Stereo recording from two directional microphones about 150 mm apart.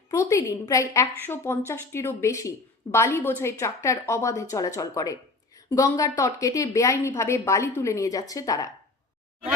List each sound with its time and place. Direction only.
0.1 s a woman's voice: 20° left (ahead or behind)